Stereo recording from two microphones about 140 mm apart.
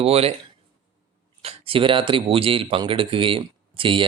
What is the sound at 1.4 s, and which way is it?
Speech, 45° right (ahead or behind).